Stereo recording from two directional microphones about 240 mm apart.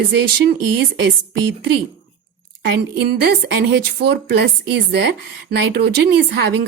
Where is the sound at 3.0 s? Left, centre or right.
Right.